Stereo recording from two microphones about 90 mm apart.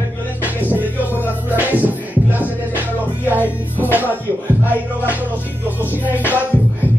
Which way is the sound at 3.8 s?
20° right (ahead or behind).